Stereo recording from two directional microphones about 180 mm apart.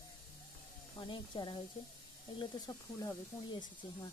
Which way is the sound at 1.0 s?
25° left (ahead or behind).